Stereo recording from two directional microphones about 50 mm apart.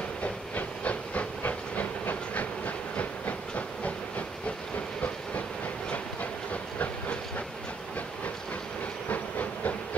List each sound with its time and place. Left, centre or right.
0.2 s hiss: left
6.5 s hiss: left
9.1 s hiss: left